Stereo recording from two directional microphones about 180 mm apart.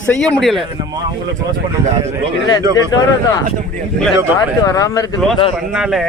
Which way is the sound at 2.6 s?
20° right (ahead or behind).